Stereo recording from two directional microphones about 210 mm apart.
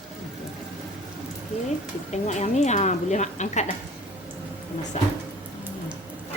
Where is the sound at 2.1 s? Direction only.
35° left (ahead or behind).